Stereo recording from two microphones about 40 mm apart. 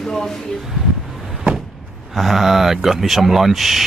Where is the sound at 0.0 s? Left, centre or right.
Centre.